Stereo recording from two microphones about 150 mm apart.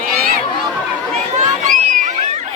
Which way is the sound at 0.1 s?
80° right.